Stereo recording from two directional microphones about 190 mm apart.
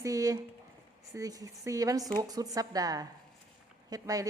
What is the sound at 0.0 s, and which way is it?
A woman's voice, 20° right (ahead or behind).